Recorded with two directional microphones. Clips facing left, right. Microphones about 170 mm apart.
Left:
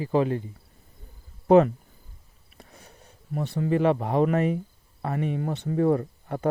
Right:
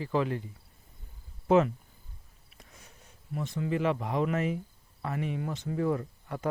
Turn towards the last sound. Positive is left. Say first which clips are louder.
# left 6 dB
turn(degrees=40)  # may be behind; listen again after turning